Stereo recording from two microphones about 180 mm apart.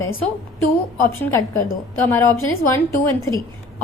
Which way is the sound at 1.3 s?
15° left (ahead or behind).